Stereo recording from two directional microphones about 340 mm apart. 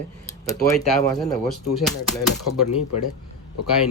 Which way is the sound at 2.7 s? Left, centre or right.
Left.